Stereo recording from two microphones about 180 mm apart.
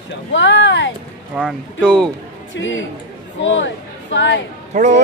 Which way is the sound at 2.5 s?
90° left.